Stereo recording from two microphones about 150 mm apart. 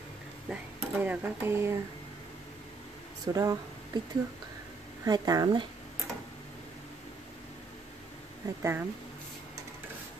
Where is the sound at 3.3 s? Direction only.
25° right (ahead or behind).